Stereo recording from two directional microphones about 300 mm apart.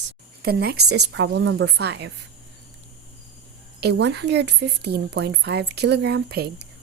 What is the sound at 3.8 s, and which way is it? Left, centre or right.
A woman's voice, right.